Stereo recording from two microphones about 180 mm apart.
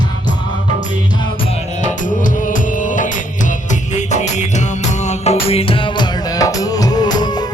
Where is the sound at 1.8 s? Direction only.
45° left (ahead or behind).